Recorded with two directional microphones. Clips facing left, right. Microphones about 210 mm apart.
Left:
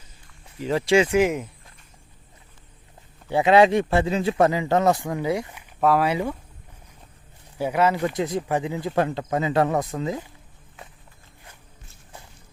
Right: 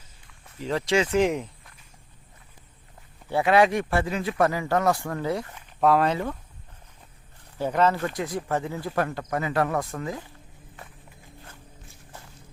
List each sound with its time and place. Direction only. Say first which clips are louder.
0.6 s speech: left 4 dB; 10° left (ahead or behind)
3.2 s speech: left 4 dB; 20° left (ahead or behind); by 6.1 s 5° left (ahead or behind)
7.6 s speech: left 2 dB; 10° left (ahead or behind)